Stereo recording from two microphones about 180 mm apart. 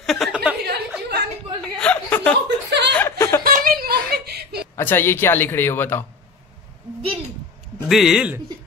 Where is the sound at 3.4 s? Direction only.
55° right (ahead or behind).